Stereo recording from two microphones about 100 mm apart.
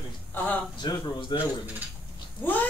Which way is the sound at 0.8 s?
50° left (ahead or behind).